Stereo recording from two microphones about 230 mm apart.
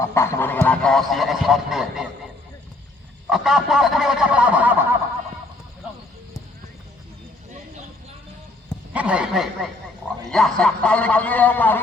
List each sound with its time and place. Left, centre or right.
0.0 s speech: centre
3.2 s speech: centre
8.9 s a man's voice: centre